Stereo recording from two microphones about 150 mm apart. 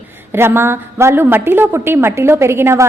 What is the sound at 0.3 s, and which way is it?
A woman's voice, 15° right (ahead or behind).